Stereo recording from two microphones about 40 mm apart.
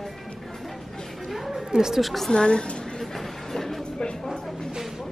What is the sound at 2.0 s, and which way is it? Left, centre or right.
Speech, centre.